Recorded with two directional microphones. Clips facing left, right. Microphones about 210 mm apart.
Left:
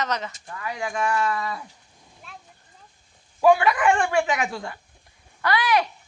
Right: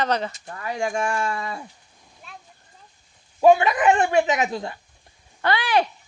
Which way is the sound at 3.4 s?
25° right (ahead or behind).